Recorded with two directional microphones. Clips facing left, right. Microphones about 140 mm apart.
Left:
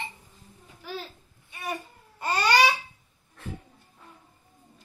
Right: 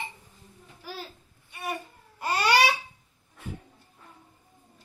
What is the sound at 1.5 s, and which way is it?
Babbling, centre (ahead or behind).